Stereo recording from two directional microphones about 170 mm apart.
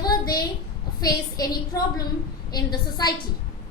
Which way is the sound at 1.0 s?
20° left (ahead or behind).